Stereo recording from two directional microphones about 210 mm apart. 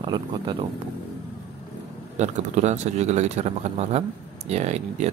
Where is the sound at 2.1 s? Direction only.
35° right (ahead or behind).